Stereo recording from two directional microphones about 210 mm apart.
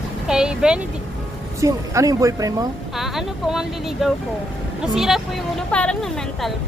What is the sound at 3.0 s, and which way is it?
Speech, centre (ahead or behind).